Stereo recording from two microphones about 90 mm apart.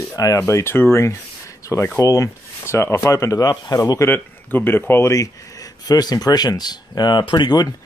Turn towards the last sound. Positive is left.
turn(degrees=50)  # may be behind; listen again after turning